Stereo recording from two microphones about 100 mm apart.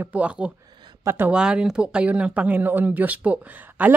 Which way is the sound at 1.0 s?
20° right (ahead or behind).